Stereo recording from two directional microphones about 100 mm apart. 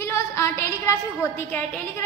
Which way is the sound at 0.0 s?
25° left (ahead or behind).